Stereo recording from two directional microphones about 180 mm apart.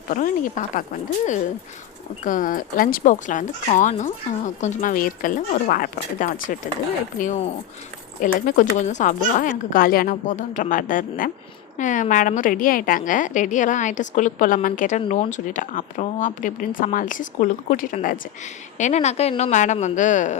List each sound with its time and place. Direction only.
0.8 s a woman's voice: 45° left (ahead or behind)